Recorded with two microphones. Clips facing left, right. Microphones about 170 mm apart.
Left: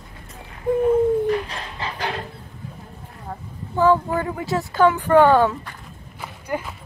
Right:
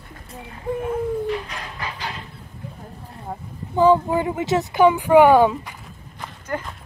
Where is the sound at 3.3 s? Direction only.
15° right (ahead or behind).